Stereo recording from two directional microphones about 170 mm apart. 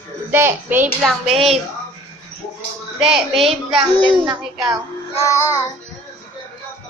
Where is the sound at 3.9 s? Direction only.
30° left (ahead or behind).